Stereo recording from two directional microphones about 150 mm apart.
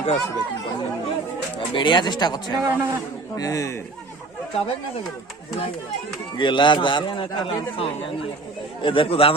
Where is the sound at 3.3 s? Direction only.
20° left (ahead or behind).